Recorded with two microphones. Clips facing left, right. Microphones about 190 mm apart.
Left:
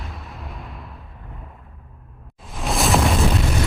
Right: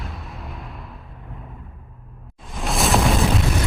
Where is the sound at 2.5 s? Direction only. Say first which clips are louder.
Even; centre (ahead or behind).